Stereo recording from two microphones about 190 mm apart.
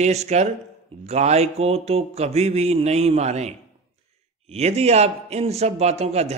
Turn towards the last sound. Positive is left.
turn(degrees=-35)  # may be behind; listen again after turning